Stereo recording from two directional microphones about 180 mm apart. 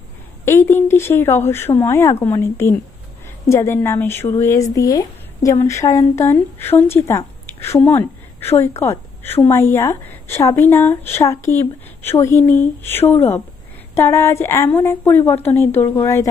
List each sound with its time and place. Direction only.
0.4 s speech: 15° left (ahead or behind)